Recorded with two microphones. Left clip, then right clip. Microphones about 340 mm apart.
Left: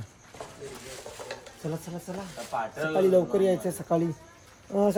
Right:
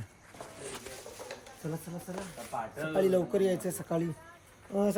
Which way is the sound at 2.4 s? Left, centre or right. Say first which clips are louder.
Left 5 dB; left.